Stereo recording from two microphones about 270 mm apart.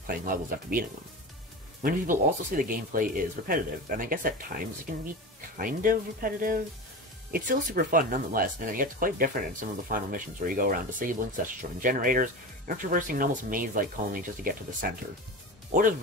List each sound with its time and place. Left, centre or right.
0.0 s speech: right